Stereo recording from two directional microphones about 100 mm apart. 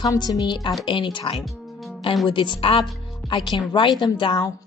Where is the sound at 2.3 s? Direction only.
50° left (ahead or behind).